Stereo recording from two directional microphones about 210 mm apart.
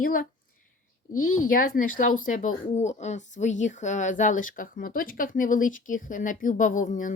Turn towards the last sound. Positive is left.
turn(degrees=40)  # may be behind; listen again after turning